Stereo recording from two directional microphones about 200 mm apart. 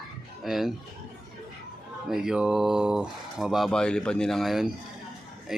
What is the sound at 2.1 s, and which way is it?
Speech, 5° right (ahead or behind).